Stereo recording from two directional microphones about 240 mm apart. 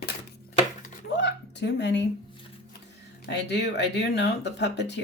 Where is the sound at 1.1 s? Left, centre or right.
Left.